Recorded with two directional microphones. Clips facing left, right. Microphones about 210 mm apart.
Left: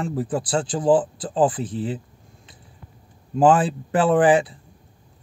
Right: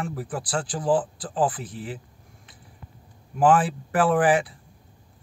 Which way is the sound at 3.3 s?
25° left (ahead or behind).